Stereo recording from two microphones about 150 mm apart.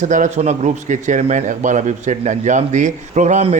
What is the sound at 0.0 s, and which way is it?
A man's voice, 55° right (ahead or behind).